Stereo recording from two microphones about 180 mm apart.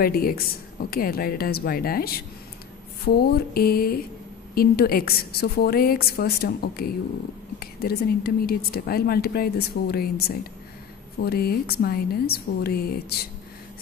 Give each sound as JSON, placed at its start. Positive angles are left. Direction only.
{"t": 0.0, "sound": "speech", "side_deg": 55}